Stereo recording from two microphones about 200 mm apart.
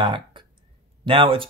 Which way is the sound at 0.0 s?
25° right (ahead or behind).